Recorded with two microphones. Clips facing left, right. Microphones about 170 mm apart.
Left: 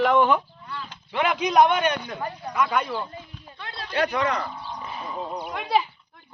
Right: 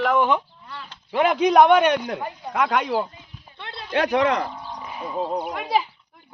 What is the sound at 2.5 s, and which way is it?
Speech, 85° right.